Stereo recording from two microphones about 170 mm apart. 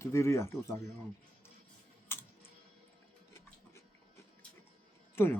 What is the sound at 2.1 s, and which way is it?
Typing, 15° left (ahead or behind).